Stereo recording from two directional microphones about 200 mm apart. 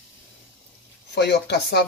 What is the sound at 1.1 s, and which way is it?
Speech, 55° left (ahead or behind).